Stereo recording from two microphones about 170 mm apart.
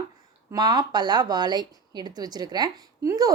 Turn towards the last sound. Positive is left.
turn(degrees=-20)  # may be behind; listen again after turning